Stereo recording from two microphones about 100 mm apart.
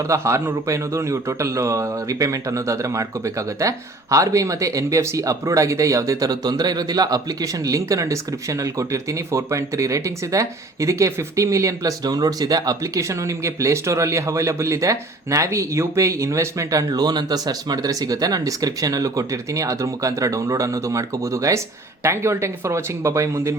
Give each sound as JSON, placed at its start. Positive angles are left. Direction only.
{"t": 0.0, "sound": "a man's voice", "side_deg": -30}